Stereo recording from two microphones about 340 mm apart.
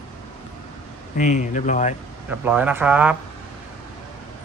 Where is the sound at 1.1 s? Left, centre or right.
Left.